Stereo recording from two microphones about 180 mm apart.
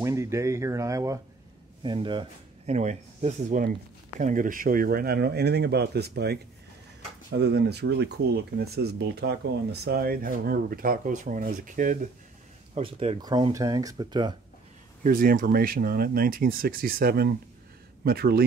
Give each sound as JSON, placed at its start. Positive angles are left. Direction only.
{"t": 0.0, "sound": "speech", "side_deg": -15}
{"t": 12.7, "sound": "speech", "side_deg": -35}
{"t": 13.2, "sound": "speech", "side_deg": -20}
{"t": 15.0, "sound": "speech", "side_deg": -50}